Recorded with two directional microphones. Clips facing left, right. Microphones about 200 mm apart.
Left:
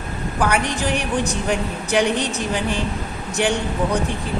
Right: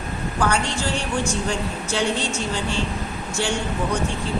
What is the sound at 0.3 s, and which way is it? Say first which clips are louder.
A woman's voice: left 2 dB; 15° left (ahead or behind).